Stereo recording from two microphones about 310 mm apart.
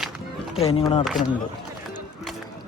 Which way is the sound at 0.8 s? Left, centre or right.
Centre.